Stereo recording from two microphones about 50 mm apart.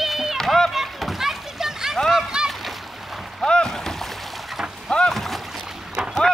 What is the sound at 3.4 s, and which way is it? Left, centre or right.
Boat, centre.